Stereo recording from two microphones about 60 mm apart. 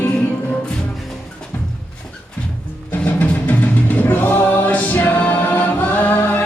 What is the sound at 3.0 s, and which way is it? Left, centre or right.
Music, left.